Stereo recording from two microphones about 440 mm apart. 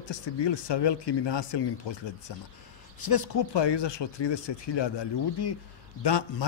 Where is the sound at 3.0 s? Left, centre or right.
Left.